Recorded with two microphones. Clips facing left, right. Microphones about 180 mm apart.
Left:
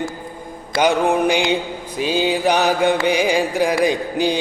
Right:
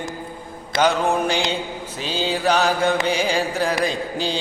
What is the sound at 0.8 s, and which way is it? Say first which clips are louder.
Music: left 3 dB; 15° left (ahead or behind).